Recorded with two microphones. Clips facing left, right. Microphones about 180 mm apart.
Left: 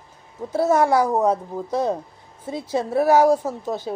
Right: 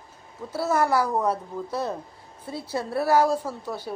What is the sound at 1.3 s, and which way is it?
Speech, 45° left (ahead or behind).